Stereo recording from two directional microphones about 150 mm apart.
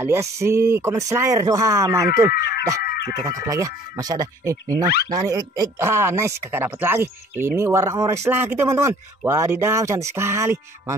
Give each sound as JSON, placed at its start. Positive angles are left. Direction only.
{"t": 0.0, "sound": "speech", "side_deg": -15}
{"t": 2.8, "sound": "dog", "side_deg": 90}
{"t": 3.2, "sound": "speech", "side_deg": -25}